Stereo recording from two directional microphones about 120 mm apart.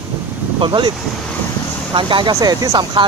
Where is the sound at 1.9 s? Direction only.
40° right (ahead or behind).